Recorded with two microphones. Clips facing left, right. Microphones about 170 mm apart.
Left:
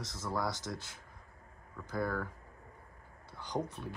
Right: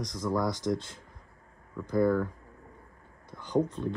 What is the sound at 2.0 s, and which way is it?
Speech, 20° right (ahead or behind).